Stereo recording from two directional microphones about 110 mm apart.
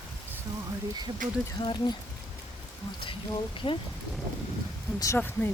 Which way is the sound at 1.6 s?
45° left (ahead or behind).